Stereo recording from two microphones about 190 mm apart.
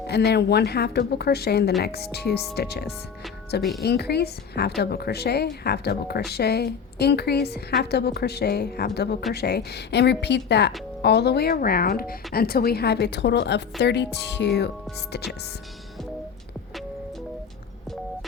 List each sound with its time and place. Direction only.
0.1 s a woman's voice: 60° left (ahead or behind)